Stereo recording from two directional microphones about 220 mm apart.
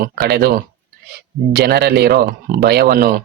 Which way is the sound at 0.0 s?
45° right (ahead or behind).